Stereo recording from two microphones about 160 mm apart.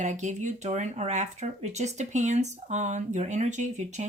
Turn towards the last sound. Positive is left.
turn(degrees=-50)  # may be behind; listen again after turning